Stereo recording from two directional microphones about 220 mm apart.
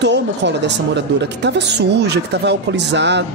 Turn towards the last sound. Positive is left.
turn(degrees=-50)  # may be behind; listen again after turning